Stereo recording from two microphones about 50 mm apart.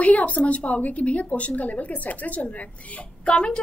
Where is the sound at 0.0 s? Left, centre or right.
Left.